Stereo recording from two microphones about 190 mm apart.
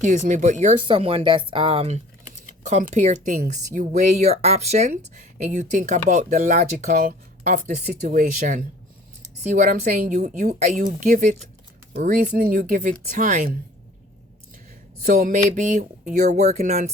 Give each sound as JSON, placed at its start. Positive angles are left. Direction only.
{"t": 0.0, "sound": "speech", "side_deg": -40}
{"t": 15.0, "sound": "speech", "side_deg": -45}